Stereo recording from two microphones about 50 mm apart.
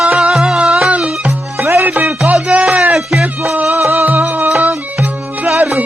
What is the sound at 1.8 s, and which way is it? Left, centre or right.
Music, right.